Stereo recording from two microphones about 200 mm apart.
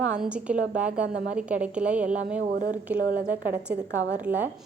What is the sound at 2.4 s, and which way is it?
Speech, 40° right (ahead or behind).